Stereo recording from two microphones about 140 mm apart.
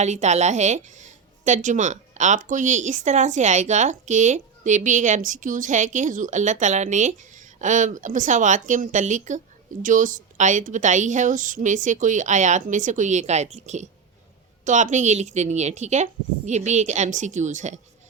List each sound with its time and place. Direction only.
0.0 s a woman's voice: 55° right (ahead or behind)